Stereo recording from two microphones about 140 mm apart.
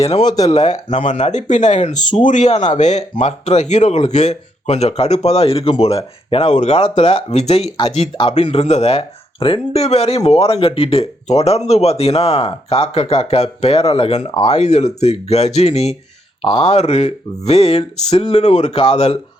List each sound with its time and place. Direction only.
0.0 s speech: 45° left (ahead or behind)
0.3 s speech: 25° left (ahead or behind)
0.7 s speech: 55° left (ahead or behind)